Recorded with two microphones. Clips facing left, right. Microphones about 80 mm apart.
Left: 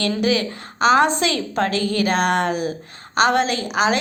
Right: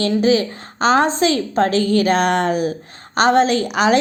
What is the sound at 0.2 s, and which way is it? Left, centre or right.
A woman's voice, right.